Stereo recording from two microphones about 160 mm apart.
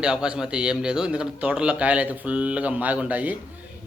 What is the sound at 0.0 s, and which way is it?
Speech, 5° right (ahead or behind).